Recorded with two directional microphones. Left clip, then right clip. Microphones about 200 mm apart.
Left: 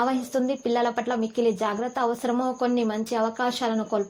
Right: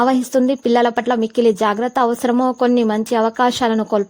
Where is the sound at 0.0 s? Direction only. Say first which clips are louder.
Right 9 dB; 45° right (ahead or behind).